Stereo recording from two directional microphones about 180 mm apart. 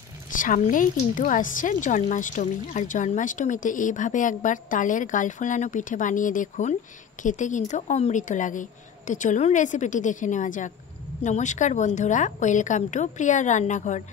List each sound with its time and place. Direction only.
0.4 s a woman's voice: 50° left (ahead or behind)